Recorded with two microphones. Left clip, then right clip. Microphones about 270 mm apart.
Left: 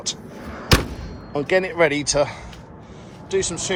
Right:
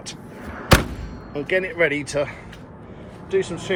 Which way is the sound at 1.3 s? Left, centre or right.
Left.